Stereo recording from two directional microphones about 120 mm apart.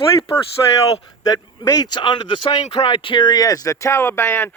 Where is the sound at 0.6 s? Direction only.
30° left (ahead or behind).